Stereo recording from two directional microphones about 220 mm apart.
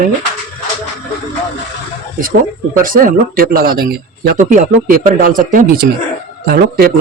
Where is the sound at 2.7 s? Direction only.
40° right (ahead or behind).